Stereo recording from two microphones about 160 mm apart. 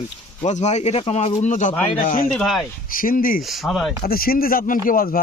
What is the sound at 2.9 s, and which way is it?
Speech, 60° left (ahead or behind).